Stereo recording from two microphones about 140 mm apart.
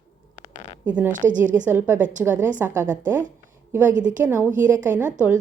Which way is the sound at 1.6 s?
15° right (ahead or behind).